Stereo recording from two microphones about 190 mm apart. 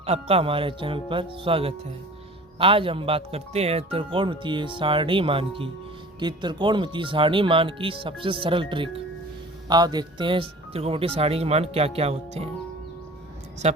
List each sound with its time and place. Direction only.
0.0 s speech: 30° right (ahead or behind)
13.6 s speech: 35° right (ahead or behind)